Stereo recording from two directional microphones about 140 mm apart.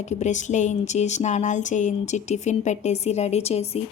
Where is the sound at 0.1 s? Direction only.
60° left (ahead or behind).